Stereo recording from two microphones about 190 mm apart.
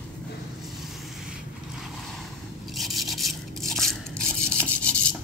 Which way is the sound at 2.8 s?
Centre (ahead or behind).